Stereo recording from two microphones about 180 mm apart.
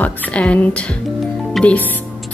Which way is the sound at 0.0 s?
10° left (ahead or behind).